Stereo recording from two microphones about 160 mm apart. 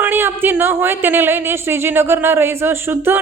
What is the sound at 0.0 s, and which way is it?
A woman's voice, 15° right (ahead or behind).